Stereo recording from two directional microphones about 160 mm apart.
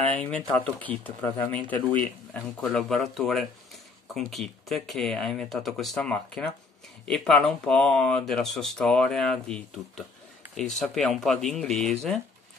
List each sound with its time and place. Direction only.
0.2 s speech: 10° left (ahead or behind)